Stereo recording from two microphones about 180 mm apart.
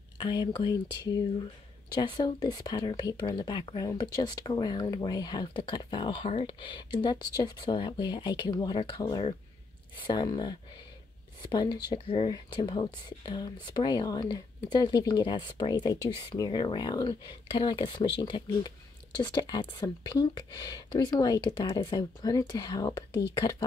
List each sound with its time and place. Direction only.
0.2 s speech: 25° left (ahead or behind)
11.5 s speech: 20° left (ahead or behind)